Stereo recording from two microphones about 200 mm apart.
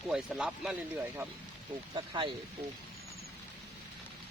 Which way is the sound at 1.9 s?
25° right (ahead or behind).